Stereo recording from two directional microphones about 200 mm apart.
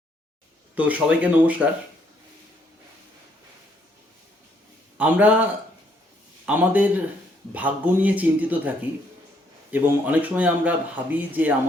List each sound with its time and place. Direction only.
0.8 s speech: 5° right (ahead or behind)
4.9 s speech: 10° right (ahead or behind)
9.7 s speech: 10° right (ahead or behind)